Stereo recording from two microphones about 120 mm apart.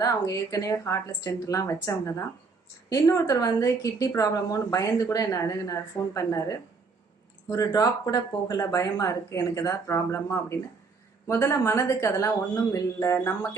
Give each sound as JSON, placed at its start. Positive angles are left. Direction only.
{"t": 0.0, "sound": "a woman's voice", "side_deg": 30}